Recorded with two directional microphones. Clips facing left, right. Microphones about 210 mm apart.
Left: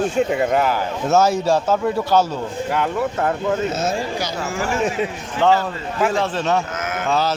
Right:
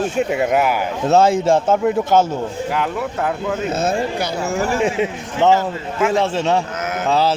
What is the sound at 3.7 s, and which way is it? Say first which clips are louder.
Speech: right 3 dB; 55° right (ahead or behind).